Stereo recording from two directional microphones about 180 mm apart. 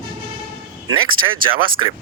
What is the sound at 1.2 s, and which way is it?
Speech, 30° right (ahead or behind).